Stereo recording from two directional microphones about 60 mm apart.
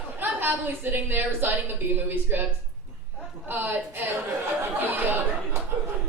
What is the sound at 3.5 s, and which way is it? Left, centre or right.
Speech, right.